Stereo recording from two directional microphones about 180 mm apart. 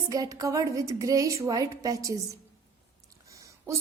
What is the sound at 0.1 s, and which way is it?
A woman's voice, 20° right (ahead or behind).